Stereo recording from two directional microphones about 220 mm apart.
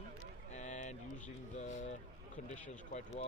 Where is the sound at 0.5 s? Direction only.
35° left (ahead or behind).